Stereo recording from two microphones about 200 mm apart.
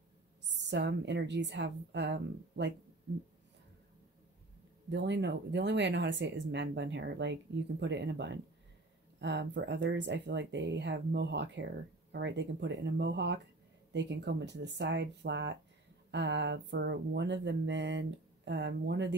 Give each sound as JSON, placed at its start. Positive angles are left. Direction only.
{"t": 0.5, "sound": "speech", "side_deg": -60}
{"t": 4.8, "sound": "speech", "side_deg": -60}